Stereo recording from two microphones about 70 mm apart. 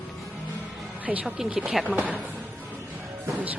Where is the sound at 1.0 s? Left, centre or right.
Right.